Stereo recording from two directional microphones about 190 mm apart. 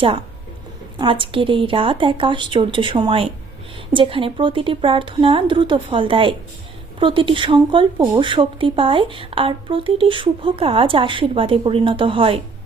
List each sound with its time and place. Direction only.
0.9 s speech: 25° right (ahead or behind)